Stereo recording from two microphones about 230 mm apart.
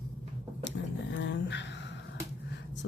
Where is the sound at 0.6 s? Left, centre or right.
Left.